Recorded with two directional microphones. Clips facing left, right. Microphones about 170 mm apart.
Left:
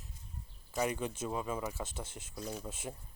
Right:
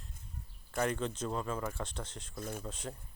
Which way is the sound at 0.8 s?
10° left (ahead or behind).